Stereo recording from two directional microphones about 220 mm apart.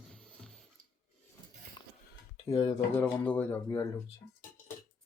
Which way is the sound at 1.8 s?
20° left (ahead or behind).